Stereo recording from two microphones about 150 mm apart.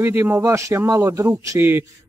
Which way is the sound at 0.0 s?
15° right (ahead or behind).